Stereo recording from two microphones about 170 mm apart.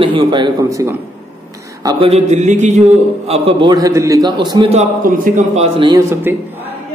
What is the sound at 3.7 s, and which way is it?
Speech, 20° right (ahead or behind).